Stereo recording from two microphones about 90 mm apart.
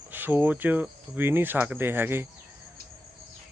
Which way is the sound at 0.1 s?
20° right (ahead or behind).